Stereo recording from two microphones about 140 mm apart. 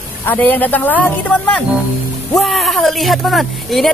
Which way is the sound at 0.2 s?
15° left (ahead or behind).